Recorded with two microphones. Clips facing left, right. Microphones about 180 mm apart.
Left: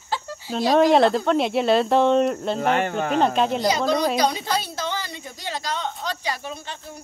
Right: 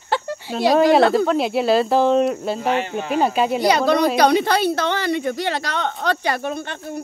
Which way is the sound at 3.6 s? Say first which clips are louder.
Right 4 dB; 65° right (ahead or behind).